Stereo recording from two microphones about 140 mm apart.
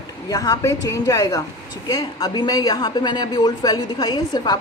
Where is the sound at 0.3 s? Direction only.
25° left (ahead or behind).